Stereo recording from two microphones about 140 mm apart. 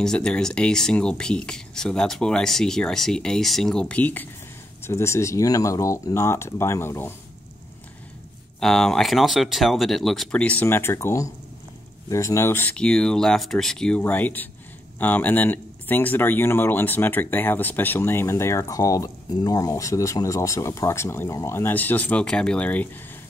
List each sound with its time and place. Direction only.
0.0 s speech: 5° left (ahead or behind)
8.5 s speech: 5° left (ahead or behind)